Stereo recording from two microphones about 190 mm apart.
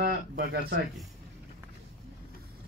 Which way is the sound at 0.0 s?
55° right (ahead or behind).